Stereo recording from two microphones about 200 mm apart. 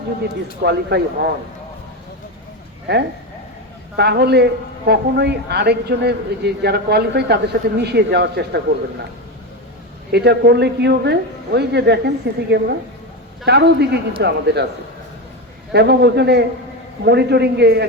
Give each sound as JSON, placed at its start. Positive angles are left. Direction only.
{"t": 0.6, "sound": "a woman's voice", "side_deg": -55}
{"t": 2.9, "sound": "a woman's voice", "side_deg": -55}
{"t": 10.1, "sound": "a woman's voice", "side_deg": -55}
{"t": 15.7, "sound": "a woman's voice", "side_deg": -55}